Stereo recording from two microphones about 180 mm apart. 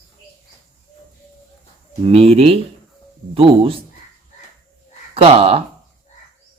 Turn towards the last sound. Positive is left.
turn(degrees=-35)  # may be behind; listen again after turning